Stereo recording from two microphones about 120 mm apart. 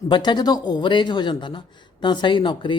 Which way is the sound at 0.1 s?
40° left (ahead or behind).